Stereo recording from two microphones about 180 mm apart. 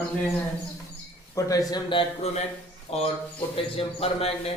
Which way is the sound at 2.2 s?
35° left (ahead or behind).